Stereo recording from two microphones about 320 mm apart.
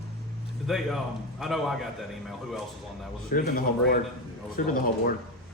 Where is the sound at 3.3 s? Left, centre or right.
Left.